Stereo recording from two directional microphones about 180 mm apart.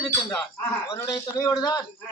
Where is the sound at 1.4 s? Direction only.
20° left (ahead or behind).